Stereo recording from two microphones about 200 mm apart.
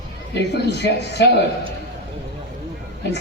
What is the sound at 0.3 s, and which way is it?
Speech, 55° left (ahead or behind).